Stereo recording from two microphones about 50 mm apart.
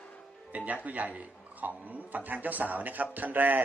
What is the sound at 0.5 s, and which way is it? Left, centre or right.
A man's voice, right.